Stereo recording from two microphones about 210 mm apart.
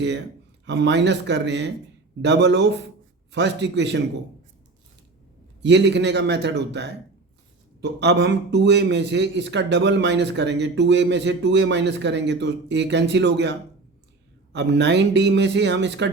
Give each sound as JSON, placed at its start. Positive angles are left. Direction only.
{"t": 0.6, "sound": "a man's voice", "side_deg": -55}
{"t": 5.6, "sound": "a man's voice", "side_deg": -55}